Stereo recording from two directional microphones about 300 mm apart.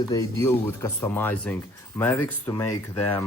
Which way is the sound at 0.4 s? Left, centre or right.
Centre.